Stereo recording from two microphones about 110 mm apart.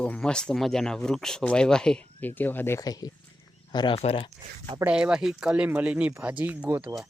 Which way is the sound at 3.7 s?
45° left (ahead or behind).